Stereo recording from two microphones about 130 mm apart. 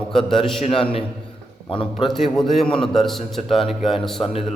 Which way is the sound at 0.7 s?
45° left (ahead or behind).